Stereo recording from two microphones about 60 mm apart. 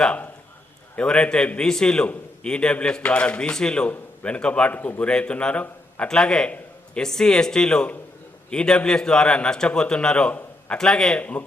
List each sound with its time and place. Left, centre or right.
0.0 s a man's voice: left